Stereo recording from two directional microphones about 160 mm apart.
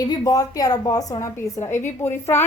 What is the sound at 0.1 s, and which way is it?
A woman's voice, 20° left (ahead or behind).